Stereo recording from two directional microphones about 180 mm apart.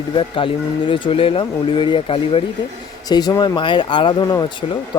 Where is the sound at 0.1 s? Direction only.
30° left (ahead or behind).